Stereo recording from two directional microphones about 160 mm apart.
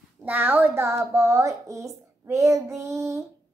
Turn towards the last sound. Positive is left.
turn(degrees=-20)  # may be behind; listen again after turning